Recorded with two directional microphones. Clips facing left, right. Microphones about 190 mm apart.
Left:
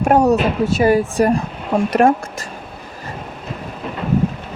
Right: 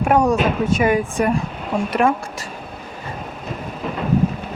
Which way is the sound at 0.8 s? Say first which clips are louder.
Left 7 dB; 35° left (ahead or behind).